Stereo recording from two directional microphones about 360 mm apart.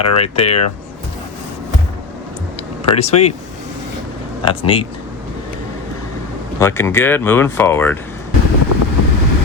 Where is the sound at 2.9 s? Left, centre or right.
Centre.